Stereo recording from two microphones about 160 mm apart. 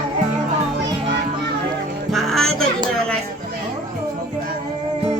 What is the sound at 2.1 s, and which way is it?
Music, centre (ahead or behind).